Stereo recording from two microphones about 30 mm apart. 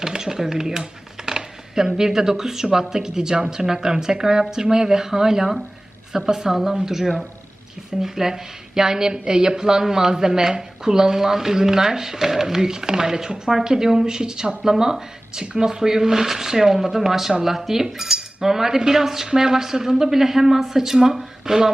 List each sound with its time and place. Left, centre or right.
0.1 s a woman's voice: centre
7.0 s speech: centre
8.0 s a woman's voice: centre